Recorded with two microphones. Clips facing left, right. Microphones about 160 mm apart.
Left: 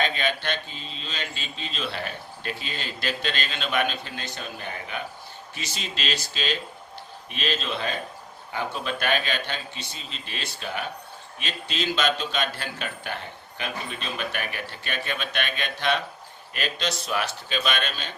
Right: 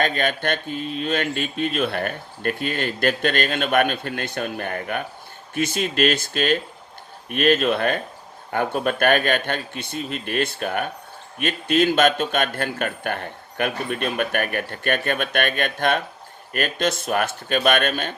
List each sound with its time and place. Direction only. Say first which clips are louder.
0.0 s speech: right 4 dB; 50° right (ahead or behind)